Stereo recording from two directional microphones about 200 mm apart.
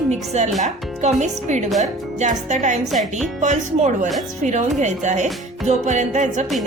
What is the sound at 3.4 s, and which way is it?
A woman's voice, 35° right (ahead or behind).